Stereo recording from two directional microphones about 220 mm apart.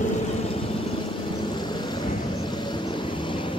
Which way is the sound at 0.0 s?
25° left (ahead or behind).